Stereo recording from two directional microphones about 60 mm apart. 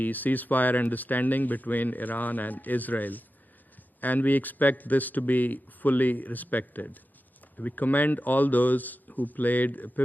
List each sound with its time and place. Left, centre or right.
0.0 s speech: left